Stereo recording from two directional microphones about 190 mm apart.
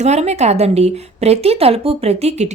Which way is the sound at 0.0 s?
35° right (ahead or behind).